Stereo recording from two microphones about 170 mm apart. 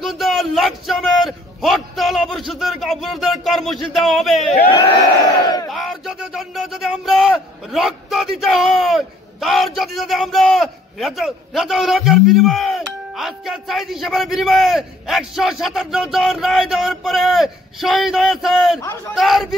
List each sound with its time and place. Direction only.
0.0 s a man's voice: centre (ahead or behind)
5.4 s battle cry: 25° left (ahead or behind)
5.7 s a man's voice: centre (ahead or behind)